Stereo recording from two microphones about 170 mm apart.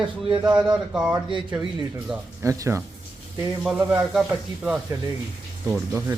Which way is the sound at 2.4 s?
20° right (ahead or behind).